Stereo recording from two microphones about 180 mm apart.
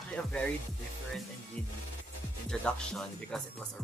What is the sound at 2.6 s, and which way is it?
Speech, 5° left (ahead or behind).